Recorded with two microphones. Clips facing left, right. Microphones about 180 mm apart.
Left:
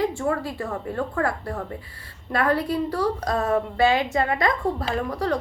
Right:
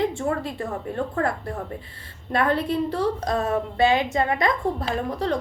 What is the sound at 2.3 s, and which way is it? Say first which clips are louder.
A woman's voice: even; 25° right (ahead or behind).